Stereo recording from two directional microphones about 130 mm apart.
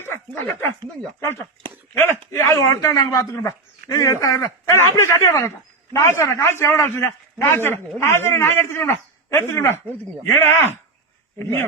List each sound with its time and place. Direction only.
0.0 s dog: 20° left (ahead or behind)
2.3 s a man's voice: 25° left (ahead or behind)